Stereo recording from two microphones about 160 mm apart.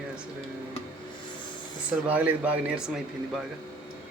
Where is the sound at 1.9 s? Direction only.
10° right (ahead or behind).